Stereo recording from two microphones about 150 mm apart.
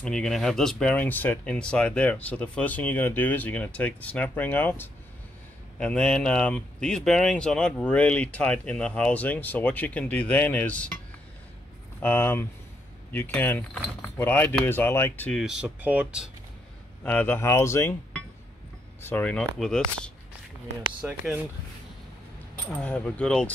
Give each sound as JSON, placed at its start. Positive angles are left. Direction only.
{"t": 0.0, "sound": "speech", "side_deg": 5}
{"t": 12.0, "sound": "speech", "side_deg": 15}
{"t": 15.3, "sound": "speech", "side_deg": -5}
{"t": 17.0, "sound": "speech", "side_deg": 10}
{"t": 18.9, "sound": "speech", "side_deg": 10}
{"t": 21.0, "sound": "speech", "side_deg": -5}
{"t": 22.7, "sound": "speech", "side_deg": 10}